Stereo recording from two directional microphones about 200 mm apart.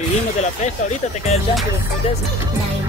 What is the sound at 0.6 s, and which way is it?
Speech, 35° left (ahead or behind).